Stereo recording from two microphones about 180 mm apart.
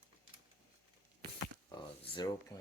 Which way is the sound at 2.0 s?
25° left (ahead or behind).